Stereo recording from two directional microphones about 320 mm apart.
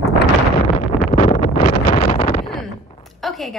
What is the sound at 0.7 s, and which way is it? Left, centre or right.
Wind noise, left.